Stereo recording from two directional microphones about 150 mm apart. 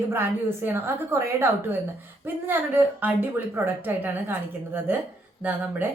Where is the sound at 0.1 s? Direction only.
15° right (ahead or behind).